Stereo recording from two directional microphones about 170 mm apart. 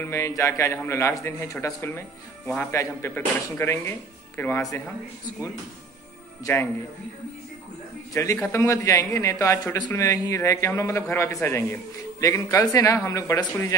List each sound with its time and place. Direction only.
0.0 s speech: 15° left (ahead or behind)
6.4 s speech: 15° left (ahead or behind)
8.1 s a man's voice: 20° left (ahead or behind)